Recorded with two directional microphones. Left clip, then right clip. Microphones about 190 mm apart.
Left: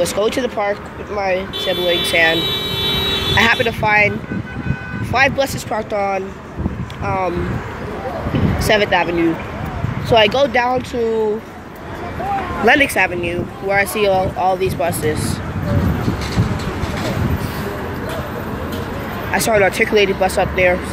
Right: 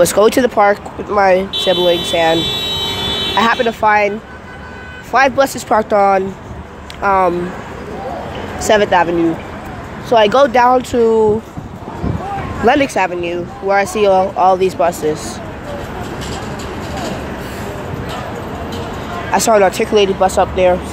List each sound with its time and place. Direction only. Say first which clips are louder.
0.0 s speech: right 7 dB; 35° right (ahead or behind)
2.5 s a sound: right 1 dB; 35° left (ahead or behind)
3.3 s speech: right 2 dB; 15° right (ahead or behind)
5.1 s speech: right 4 dB; 25° right (ahead or behind)
8.5 s speech: right 4 dB; 20° right (ahead or behind)
12.6 s speech: right 1 dB; 15° right (ahead or behind)
19.3 s speech: right 4 dB; 15° right (ahead or behind)